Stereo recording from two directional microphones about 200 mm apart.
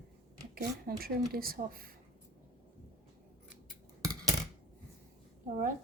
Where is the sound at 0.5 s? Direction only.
50° right (ahead or behind).